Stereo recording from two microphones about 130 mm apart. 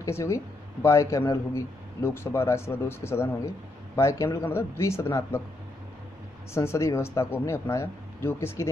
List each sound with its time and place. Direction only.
0.0 s a man's voice: 25° left (ahead or behind)
6.5 s a man's voice: 20° left (ahead or behind)